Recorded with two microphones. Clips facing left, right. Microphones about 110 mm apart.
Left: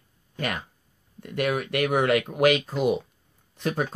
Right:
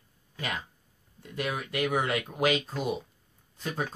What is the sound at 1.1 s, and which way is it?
Speech, 65° left (ahead or behind).